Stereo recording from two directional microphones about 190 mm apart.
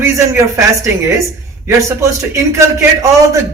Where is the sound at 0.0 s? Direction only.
15° right (ahead or behind).